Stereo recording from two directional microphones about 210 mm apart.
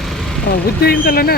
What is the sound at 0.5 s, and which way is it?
Speech, 50° left (ahead or behind).